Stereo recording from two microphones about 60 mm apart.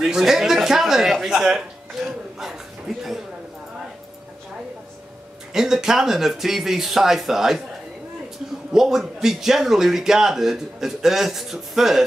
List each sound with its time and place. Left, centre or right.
0.0 s a man's voice: centre
5.5 s speech: centre
8.7 s a man's voice: centre